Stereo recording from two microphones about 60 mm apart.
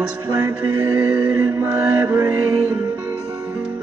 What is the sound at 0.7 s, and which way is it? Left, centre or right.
Music, right.